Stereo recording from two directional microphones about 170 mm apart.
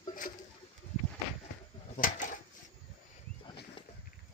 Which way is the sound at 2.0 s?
50° left (ahead or behind).